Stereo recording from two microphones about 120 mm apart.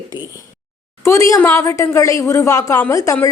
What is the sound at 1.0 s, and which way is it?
Speech, 25° left (ahead or behind).